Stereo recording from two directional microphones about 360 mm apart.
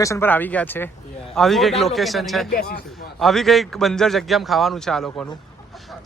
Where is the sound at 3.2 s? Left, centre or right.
Centre.